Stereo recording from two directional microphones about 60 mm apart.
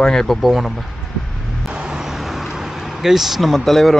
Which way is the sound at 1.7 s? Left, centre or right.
Centre.